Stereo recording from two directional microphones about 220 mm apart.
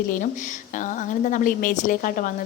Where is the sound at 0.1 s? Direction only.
35° left (ahead or behind).